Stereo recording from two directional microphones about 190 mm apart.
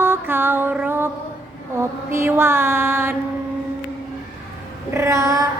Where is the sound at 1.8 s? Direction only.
15° right (ahead or behind).